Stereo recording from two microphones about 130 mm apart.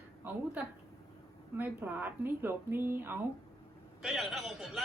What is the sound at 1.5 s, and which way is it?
Speech, 15° right (ahead or behind).